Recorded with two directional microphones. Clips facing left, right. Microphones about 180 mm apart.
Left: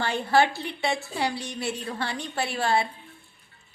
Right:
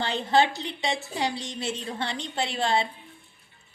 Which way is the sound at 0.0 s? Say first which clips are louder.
Left 1 dB; 20° right (ahead or behind).